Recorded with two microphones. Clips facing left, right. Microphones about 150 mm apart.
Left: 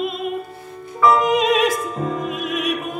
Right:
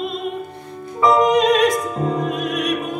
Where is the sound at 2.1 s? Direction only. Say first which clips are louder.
Right 3 dB; centre (ahead or behind).